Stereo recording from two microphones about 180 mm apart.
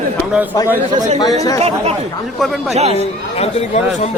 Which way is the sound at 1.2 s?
20° left (ahead or behind).